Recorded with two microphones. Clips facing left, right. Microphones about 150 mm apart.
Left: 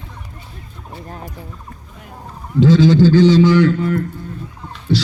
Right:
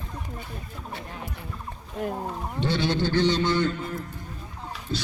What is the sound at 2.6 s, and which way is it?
A man's voice, 90° left.